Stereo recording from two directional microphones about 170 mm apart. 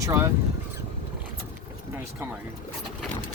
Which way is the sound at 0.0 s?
15° right (ahead or behind).